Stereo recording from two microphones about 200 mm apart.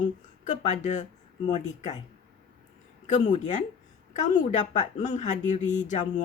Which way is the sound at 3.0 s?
35° left (ahead or behind).